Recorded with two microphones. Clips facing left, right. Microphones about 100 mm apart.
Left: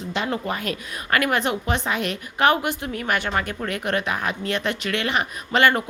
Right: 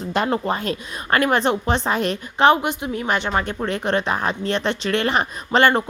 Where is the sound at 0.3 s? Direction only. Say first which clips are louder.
Right 4 dB; 30° right (ahead or behind).